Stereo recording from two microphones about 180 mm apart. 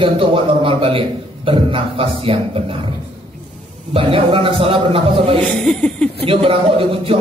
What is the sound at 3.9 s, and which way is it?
A man's voice, 30° right (ahead or behind).